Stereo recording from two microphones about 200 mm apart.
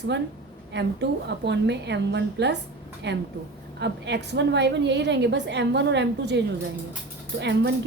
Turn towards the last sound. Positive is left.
turn(degrees=-60)  # may be behind; listen again after turning